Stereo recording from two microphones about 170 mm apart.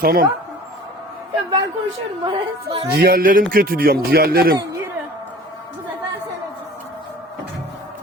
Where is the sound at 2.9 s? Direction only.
60° right (ahead or behind).